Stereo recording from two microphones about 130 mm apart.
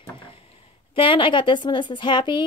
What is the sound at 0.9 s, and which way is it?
Speech, 40° left (ahead or behind).